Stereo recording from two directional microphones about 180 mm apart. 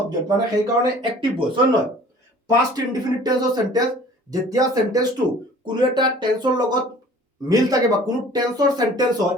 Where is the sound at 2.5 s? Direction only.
20° right (ahead or behind).